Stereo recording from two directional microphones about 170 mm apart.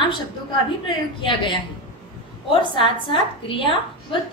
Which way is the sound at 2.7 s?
30° left (ahead or behind).